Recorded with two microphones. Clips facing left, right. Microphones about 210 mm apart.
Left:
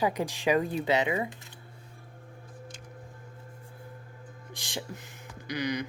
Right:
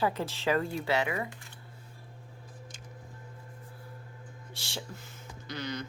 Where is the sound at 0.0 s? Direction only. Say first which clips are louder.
Left 2 dB; 15° left (ahead or behind).